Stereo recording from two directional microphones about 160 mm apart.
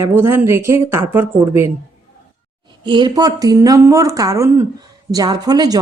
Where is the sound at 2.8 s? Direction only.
25° right (ahead or behind).